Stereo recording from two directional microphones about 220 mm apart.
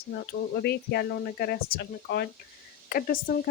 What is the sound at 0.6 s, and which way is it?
Speech, 45° left (ahead or behind).